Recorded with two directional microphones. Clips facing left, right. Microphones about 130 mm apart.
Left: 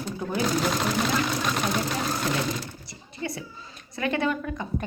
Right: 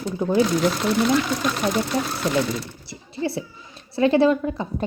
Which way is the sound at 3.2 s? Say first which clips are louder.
Right 7 dB; 30° right (ahead or behind).